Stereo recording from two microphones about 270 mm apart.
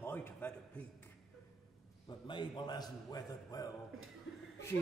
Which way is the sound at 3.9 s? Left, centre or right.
Right.